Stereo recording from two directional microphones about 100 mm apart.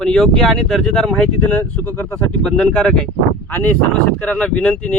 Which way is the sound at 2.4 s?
10° left (ahead or behind).